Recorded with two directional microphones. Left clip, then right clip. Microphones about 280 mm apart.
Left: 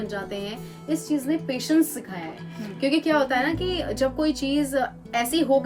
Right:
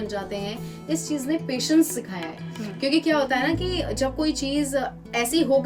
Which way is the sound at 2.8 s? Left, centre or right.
Centre.